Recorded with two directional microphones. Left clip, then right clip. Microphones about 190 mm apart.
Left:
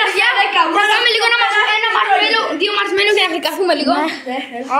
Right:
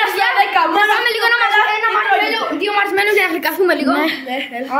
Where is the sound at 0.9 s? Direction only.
25° right (ahead or behind).